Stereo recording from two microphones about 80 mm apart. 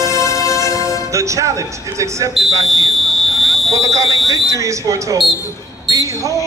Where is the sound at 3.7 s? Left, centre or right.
Right.